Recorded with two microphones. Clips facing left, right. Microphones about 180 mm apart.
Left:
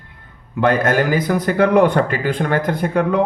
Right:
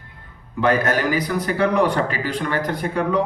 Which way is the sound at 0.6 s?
55° left (ahead or behind).